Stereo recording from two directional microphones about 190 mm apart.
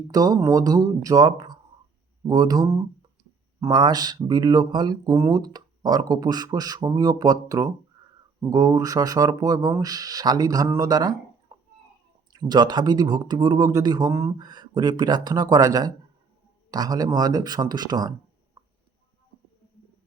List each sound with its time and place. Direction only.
0.1 s speech: 20° right (ahead or behind)
12.3 s speech: 20° right (ahead or behind)
18.6 s a sound: 15° right (ahead or behind)